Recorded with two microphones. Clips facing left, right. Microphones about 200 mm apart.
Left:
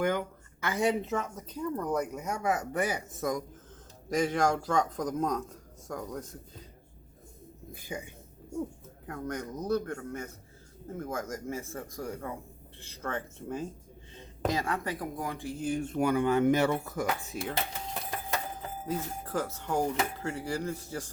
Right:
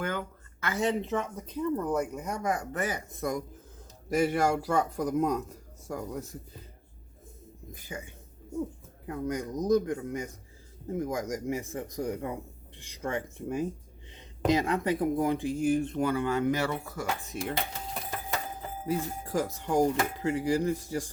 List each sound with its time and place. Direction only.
0.0 s speech: 15° left (ahead or behind)
1.4 s speech: 5° right (ahead or behind)
2.5 s a man's voice: 10° left (ahead or behind); by 6.6 s 10° right (ahead or behind)
7.7 s speech: 10° left (ahead or behind)
9.0 s a man's voice: 10° right (ahead or behind)
15.8 s speech: 10° left (ahead or behind)
17.3 s speech: centre (ahead or behind)
18.9 s a man's voice: 10° right (ahead or behind)